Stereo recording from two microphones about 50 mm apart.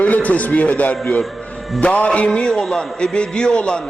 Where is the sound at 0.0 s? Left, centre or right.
Left.